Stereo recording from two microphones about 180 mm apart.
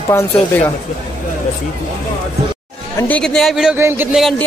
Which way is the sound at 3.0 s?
10° left (ahead or behind).